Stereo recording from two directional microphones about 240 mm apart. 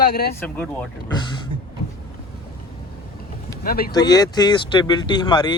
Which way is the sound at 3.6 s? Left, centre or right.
Left.